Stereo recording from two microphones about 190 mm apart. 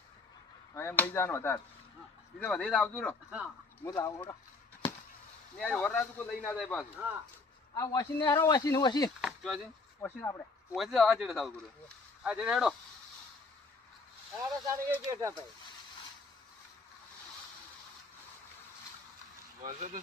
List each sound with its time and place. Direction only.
0.7 s speech: 15° left (ahead or behind)
5.5 s speech: 5° left (ahead or behind)
7.8 s speech: 20° left (ahead or behind)
9.0 s speech: centre (ahead or behind)
10.0 s speech: 10° left (ahead or behind)
10.8 s speech: centre (ahead or behind)
14.7 s speech: 15° right (ahead or behind)
19.6 s speech: 45° right (ahead or behind)